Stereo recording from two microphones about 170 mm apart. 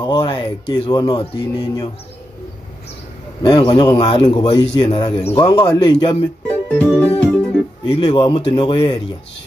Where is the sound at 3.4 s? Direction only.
25° left (ahead or behind).